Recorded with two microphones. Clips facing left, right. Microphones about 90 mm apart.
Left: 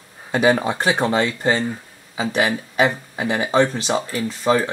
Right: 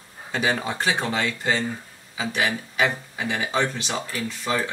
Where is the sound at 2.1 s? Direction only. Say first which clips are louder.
Left 5 dB; 30° left (ahead or behind).